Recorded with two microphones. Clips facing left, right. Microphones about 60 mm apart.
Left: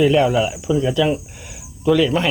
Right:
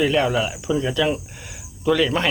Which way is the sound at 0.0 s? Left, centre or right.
Centre.